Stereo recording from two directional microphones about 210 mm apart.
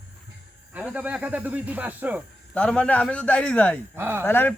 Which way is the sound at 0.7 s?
5° right (ahead or behind).